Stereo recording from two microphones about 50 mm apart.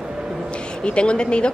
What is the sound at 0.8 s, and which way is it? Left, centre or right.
Speech, left.